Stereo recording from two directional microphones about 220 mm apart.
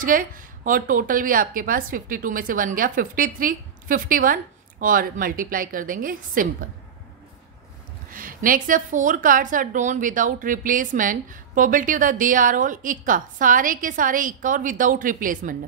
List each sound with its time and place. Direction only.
0.0 s a woman's voice: 40° right (ahead or behind)
8.1 s a woman's voice: 40° right (ahead or behind)